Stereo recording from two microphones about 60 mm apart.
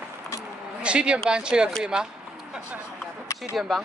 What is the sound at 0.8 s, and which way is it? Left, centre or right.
Speech, centre.